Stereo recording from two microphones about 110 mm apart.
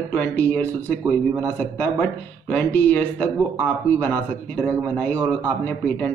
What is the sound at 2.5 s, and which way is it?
Speech, 15° left (ahead or behind).